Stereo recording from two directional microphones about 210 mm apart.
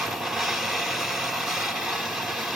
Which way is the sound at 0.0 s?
Centre (ahead or behind).